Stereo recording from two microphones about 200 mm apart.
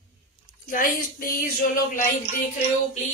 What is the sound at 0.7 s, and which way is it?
Speech, 45° left (ahead or behind).